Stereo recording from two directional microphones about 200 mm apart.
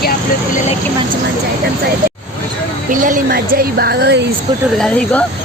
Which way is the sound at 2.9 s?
40° right (ahead or behind).